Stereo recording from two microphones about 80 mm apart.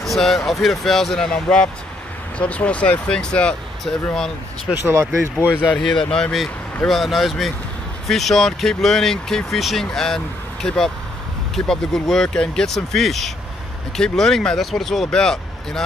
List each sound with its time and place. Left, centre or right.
0.0 s speech: centre
4.7 s speech: right
5.8 s speech: centre
6.9 s speech: centre